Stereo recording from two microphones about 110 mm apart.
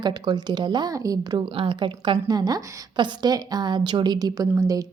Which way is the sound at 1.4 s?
55° right (ahead or behind).